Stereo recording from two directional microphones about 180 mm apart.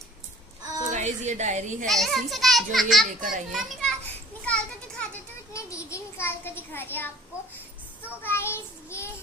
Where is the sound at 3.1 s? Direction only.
45° right (ahead or behind).